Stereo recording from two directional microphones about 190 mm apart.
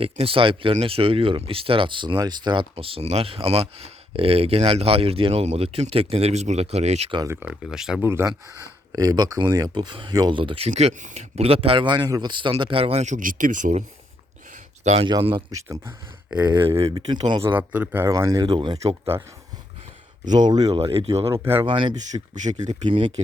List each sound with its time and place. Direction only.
0.0 s speech: 30° right (ahead or behind)
7.2 s speech: 10° right (ahead or behind)
8.0 s speech: 15° right (ahead or behind)
10.7 s speech: 35° right (ahead or behind)
14.8 s speech: 30° right (ahead or behind); by 16.5 s 10° right (ahead or behind)
16.5 s speech: 25° right (ahead or behind)
17.4 s speech: 10° right (ahead or behind); by 19.1 s 30° right (ahead or behind)
20.4 s speech: 20° right (ahead or behind)
21.2 s speech: 15° right (ahead or behind)
21.7 s speech: 25° right (ahead or behind)
22.1 s speech: 40° right (ahead or behind)